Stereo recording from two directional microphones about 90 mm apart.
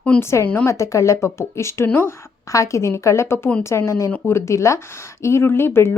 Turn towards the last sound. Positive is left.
turn(degrees=25)  # may be behind; listen again after turning